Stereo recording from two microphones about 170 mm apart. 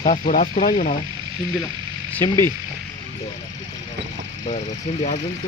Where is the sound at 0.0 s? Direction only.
50° left (ahead or behind).